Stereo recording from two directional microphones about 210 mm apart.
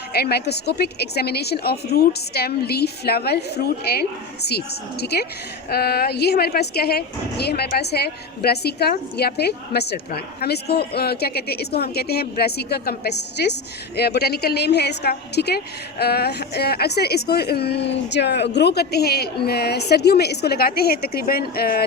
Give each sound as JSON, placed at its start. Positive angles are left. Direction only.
{"t": 0.1, "sound": "a woman's voice", "side_deg": 50}